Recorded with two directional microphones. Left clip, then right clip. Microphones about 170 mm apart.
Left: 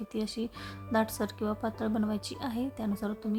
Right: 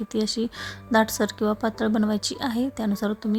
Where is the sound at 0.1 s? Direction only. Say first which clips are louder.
Right 10 dB; 25° right (ahead or behind).